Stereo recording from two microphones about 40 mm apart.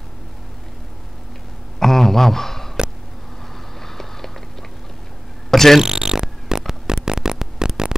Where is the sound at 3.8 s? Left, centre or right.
Centre.